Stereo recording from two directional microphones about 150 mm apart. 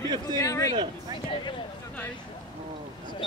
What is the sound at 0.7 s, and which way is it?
Speech, 30° right (ahead or behind).